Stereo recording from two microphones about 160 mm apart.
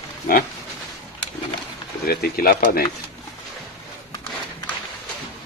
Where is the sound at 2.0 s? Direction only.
70° left (ahead or behind).